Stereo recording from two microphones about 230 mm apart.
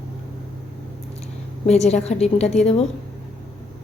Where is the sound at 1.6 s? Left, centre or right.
Left.